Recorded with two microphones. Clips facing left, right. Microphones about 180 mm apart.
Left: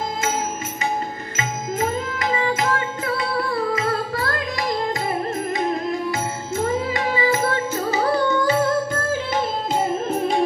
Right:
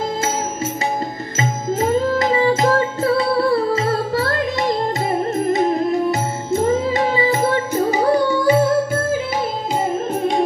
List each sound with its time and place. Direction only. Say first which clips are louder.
2.3 s music: right 5 dB; 30° right (ahead or behind); by 9.0 s 10° right (ahead or behind)